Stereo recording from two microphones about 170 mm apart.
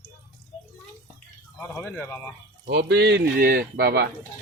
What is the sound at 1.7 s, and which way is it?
Speech, 5° left (ahead or behind).